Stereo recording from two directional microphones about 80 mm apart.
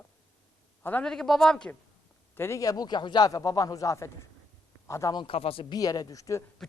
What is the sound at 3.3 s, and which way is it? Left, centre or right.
Speech, left.